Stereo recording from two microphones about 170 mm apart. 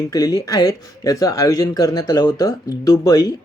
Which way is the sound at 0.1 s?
20° left (ahead or behind).